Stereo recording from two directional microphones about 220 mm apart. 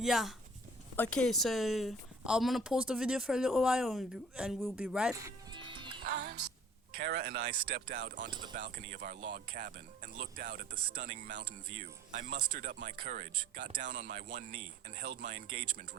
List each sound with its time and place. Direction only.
0.0 s speech: centre (ahead or behind)
5.1 s music: 15° right (ahead or behind)
6.0 s music: 50° right (ahead or behind)
6.9 s speech: 45° right (ahead or behind)